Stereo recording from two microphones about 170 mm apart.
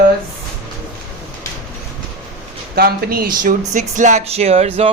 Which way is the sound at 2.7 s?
60° right (ahead or behind).